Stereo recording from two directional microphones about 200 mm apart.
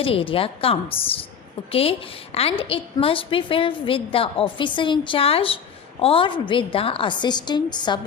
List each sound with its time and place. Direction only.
0.0 s a woman's voice: 25° left (ahead or behind)